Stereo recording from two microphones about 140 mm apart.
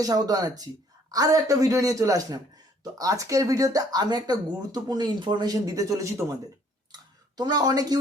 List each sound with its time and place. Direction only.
0.0 s speech: 25° right (ahead or behind)
6.9 s clicking: 30° right (ahead or behind)